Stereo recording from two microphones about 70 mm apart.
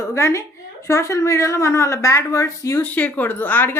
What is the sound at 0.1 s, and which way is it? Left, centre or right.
A woman's voice, left.